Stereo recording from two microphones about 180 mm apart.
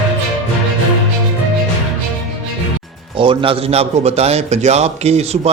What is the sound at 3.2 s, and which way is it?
A man's voice, 30° right (ahead or behind).